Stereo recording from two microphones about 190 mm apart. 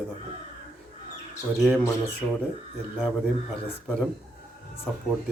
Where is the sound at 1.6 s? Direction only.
Centre (ahead or behind).